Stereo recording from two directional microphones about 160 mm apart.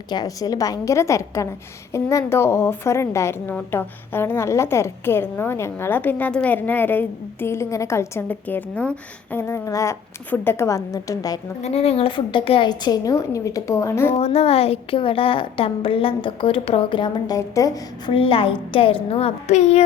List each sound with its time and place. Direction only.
0.1 s a woman's voice: 25° left (ahead or behind)
11.6 s a woman's voice: 45° left (ahead or behind); by 14.1 s 15° left (ahead or behind)
14.1 s a woman's voice: 40° left (ahead or behind); by 18.1 s 20° left (ahead or behind)
18.1 s a woman's voice: 35° left (ahead or behind)